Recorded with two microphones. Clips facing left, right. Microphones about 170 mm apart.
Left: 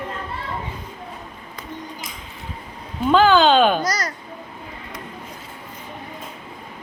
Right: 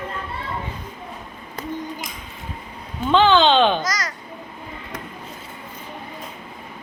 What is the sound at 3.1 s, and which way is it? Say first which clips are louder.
Speech: left 1 dB; 5° left (ahead or behind).